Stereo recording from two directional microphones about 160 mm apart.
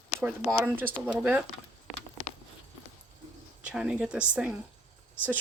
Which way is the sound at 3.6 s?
5° right (ahead or behind).